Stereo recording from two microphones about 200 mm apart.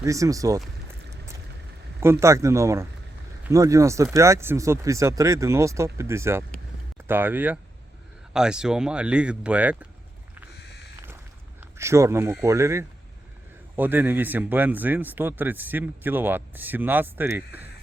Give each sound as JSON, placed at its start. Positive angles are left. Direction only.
{"t": 0.0, "sound": "speech", "side_deg": -15}
{"t": 2.0, "sound": "speech", "side_deg": -15}
{"t": 11.8, "sound": "speech", "side_deg": -15}